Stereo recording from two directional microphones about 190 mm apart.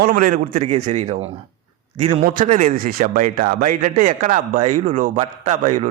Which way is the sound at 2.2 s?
45° right (ahead or behind).